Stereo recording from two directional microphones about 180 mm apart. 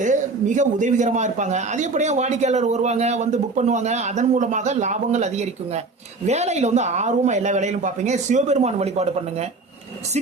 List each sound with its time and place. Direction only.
0.0 s a man's voice: 45° right (ahead or behind)